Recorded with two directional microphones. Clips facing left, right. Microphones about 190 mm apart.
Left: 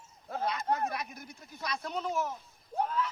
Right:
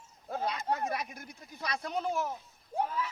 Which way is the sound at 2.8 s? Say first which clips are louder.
Left 1 dB; 5° right (ahead or behind).